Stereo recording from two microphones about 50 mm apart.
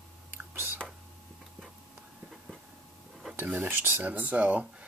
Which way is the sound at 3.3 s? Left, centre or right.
Right.